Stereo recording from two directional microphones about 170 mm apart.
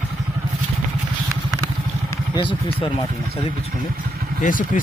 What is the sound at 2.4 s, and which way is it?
Speech, 30° left (ahead or behind).